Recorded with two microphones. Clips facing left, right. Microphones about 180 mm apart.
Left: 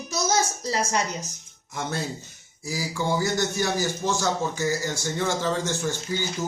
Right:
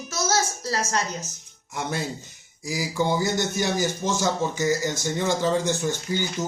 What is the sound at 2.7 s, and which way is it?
A man's voice, 15° right (ahead or behind).